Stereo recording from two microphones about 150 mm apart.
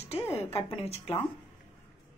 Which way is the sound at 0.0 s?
45° left (ahead or behind).